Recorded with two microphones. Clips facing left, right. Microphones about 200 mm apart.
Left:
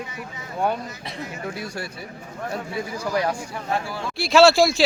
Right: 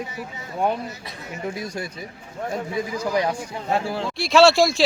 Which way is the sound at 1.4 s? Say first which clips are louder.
Right 5 dB; 20° right (ahead or behind).